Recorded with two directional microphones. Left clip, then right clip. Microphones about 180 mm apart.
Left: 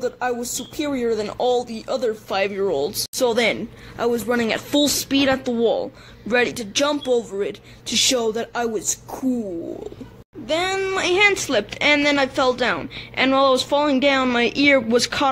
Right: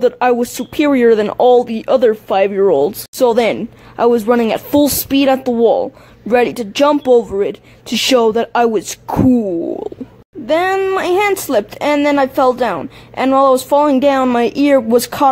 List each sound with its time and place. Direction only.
0.0 s speech: 45° right (ahead or behind)
3.2 s speech: 55° right (ahead or behind)